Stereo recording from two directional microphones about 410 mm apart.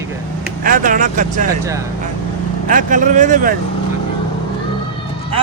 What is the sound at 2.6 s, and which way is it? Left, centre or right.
Speech, centre.